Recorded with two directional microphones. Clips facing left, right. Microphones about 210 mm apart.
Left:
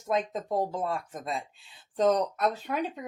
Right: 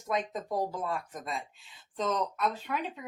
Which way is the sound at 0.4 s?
25° left (ahead or behind).